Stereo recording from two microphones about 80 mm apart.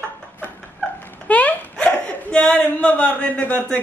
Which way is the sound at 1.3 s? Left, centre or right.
Centre.